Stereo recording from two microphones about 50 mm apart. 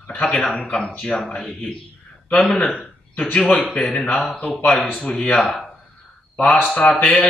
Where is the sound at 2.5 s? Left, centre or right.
Centre.